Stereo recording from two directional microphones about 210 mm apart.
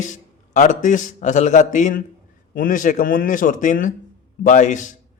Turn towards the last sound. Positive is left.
turn(degrees=35)  # may be behind; listen again after turning